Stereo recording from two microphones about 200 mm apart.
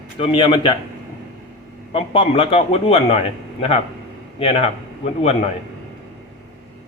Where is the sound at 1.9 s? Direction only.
25° left (ahead or behind).